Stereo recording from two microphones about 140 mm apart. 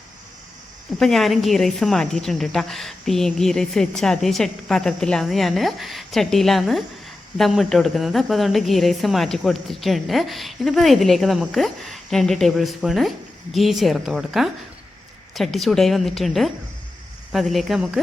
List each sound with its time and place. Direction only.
0.9 s speech: 5° left (ahead or behind)